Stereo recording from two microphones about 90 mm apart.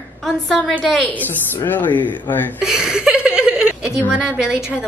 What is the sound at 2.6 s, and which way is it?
A woman's voice, 10° right (ahead or behind).